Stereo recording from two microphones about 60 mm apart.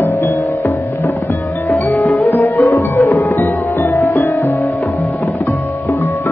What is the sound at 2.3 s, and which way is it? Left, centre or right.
Music, left.